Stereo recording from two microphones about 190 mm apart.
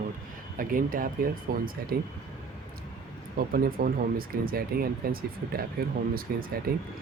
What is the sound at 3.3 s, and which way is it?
Speech, 50° right (ahead or behind).